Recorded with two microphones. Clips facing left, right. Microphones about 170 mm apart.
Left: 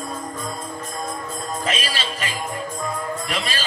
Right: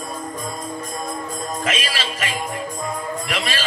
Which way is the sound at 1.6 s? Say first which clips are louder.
Right 1 dB; 35° left (ahead or behind).